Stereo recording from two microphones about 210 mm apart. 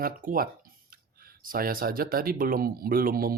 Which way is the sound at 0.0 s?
40° right (ahead or behind).